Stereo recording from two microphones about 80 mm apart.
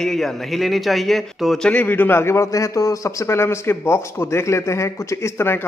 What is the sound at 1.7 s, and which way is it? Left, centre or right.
A man's voice, left.